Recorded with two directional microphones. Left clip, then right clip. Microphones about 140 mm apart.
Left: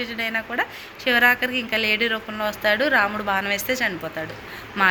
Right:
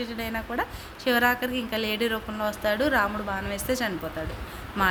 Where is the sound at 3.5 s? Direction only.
30° right (ahead or behind).